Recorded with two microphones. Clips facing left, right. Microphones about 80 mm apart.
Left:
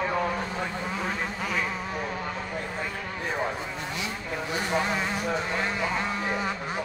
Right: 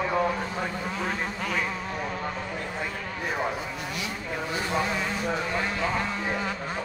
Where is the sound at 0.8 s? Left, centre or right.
Centre.